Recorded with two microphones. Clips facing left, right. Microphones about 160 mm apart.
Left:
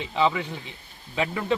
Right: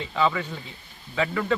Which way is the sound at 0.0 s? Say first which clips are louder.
Left 1 dB; 20° left (ahead or behind).